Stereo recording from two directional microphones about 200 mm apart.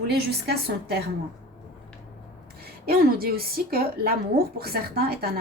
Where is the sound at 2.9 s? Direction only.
50° right (ahead or behind).